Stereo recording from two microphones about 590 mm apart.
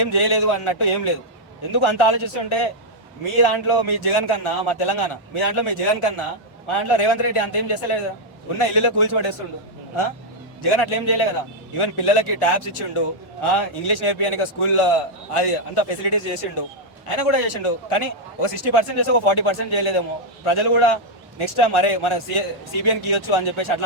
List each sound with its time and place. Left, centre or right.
0.0 s a man's voice: left
10.6 s a man's voice: left